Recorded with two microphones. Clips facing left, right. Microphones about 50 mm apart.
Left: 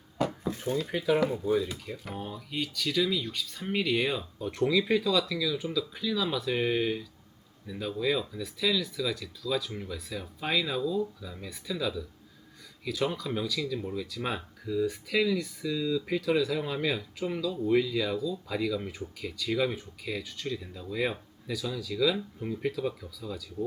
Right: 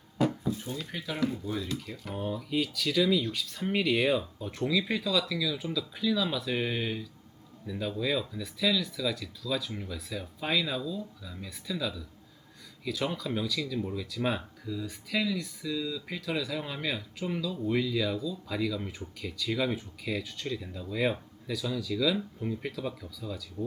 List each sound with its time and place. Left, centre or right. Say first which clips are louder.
0.4 s a sound: left 3 dB; left
0.9 s speech: left 5 dB; centre
2.1 s speech: right 6 dB; centre